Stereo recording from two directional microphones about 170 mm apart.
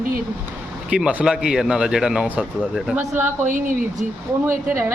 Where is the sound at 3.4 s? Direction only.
50° right (ahead or behind).